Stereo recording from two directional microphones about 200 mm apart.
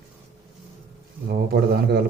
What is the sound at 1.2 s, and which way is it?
Speech, 50° right (ahead or behind).